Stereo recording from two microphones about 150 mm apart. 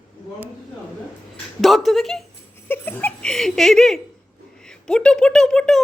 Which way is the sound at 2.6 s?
15° left (ahead or behind).